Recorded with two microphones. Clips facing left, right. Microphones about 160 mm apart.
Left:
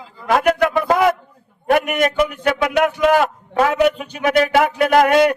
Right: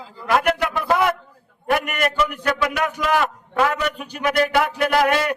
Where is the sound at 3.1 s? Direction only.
45° left (ahead or behind).